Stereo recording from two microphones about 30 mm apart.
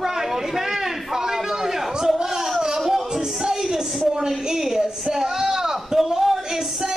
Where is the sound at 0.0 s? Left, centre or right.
Centre.